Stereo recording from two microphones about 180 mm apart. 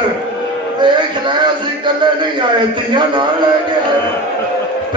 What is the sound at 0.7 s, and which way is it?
Music, 25° right (ahead or behind).